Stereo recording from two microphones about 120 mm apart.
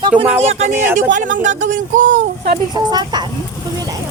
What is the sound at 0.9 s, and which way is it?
Speech, 90° right.